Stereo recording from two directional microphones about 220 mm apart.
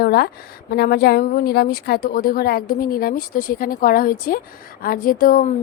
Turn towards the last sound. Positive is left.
turn(degrees=40)  # may be behind; listen again after turning